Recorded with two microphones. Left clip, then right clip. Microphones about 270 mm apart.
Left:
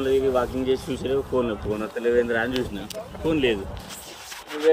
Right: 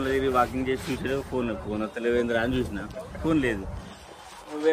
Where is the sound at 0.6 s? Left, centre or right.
Right.